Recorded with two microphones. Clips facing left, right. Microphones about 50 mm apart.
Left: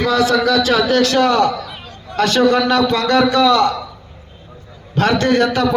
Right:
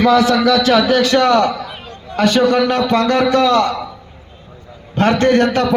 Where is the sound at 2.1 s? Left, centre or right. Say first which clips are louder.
Right 1 dB; centre.